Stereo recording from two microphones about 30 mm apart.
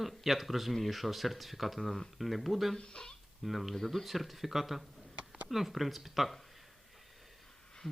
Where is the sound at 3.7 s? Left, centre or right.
Centre.